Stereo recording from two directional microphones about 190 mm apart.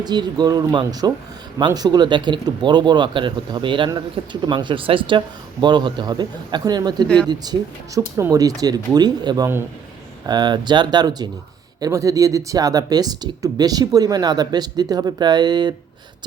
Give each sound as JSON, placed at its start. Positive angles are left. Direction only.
{"t": 0.0, "sound": "speech", "side_deg": -20}